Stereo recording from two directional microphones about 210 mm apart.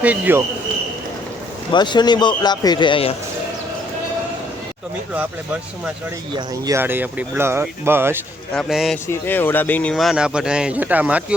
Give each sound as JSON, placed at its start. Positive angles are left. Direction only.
{"t": 0.0, "sound": "speech", "side_deg": -10}
{"t": 1.7, "sound": "a man's voice", "side_deg": 20}
{"t": 6.3, "sound": "speech", "side_deg": -15}
{"t": 8.5, "sound": "speech", "side_deg": 0}